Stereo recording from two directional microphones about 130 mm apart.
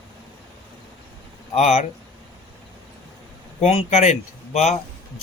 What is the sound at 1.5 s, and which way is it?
Speech, 60° left (ahead or behind).